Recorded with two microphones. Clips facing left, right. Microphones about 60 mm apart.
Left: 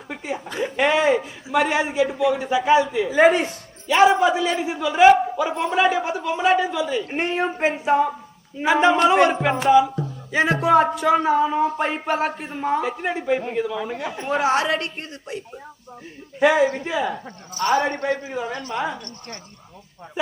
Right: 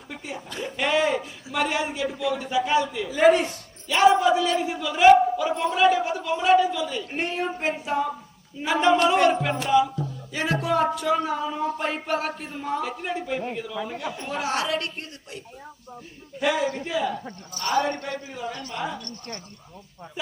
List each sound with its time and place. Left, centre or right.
0.1 s a woman's voice: left
7.0 s a woman's voice: left
16.4 s a woman's voice: left